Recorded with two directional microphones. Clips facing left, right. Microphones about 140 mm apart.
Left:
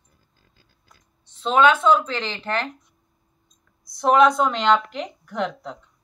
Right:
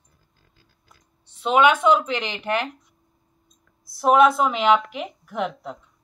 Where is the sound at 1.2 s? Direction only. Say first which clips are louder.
Even; 10° right (ahead or behind).